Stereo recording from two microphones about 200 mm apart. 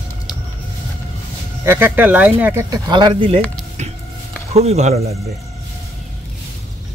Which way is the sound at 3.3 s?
5° left (ahead or behind).